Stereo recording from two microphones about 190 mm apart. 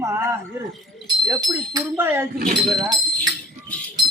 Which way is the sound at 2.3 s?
45° right (ahead or behind).